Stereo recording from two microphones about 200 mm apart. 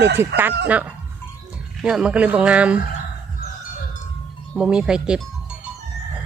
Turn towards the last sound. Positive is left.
turn(degrees=-5)  # may be behind; listen again after turning